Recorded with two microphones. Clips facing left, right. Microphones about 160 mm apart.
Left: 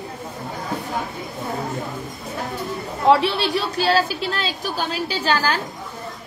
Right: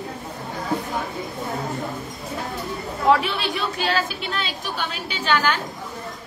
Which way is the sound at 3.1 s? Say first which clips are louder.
Left 3 dB; 30° left (ahead or behind).